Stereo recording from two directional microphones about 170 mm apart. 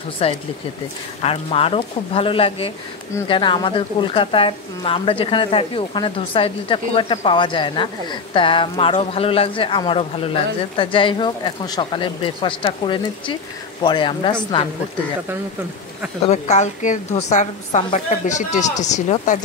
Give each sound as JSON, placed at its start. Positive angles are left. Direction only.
{"t": 0.2, "sound": "a woman's voice", "side_deg": 35}
{"t": 16.3, "sound": "a woman's voice", "side_deg": 45}